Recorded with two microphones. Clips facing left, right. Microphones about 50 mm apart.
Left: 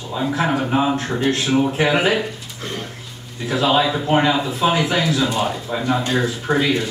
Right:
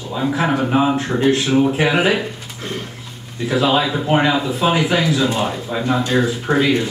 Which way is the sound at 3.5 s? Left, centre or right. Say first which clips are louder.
Right 1 dB; centre.